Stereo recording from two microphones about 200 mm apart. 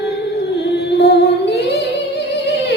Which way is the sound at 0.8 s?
55° left (ahead or behind).